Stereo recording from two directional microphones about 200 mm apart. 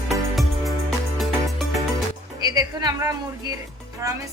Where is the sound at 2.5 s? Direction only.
20° right (ahead or behind).